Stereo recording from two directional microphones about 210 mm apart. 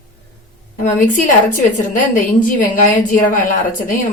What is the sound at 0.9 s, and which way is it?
A woman's voice, 40° left (ahead or behind).